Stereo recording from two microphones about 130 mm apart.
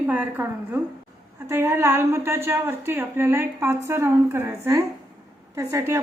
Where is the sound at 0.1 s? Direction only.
15° right (ahead or behind).